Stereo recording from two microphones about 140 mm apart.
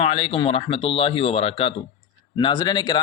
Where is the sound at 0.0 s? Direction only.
45° left (ahead or behind).